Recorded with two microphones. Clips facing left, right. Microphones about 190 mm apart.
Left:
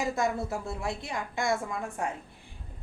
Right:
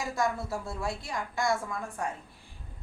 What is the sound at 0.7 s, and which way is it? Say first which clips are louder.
Speech: left 1 dB; 20° left (ahead or behind).